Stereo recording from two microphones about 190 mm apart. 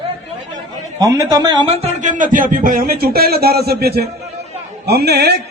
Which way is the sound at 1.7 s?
40° right (ahead or behind).